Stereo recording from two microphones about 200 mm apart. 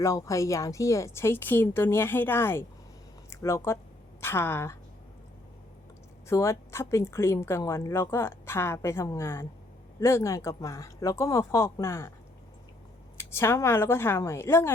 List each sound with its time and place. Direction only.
0.0 s speech: 15° left (ahead or behind)
6.2 s speech: 15° left (ahead or behind)
13.1 s speech: 10° left (ahead or behind)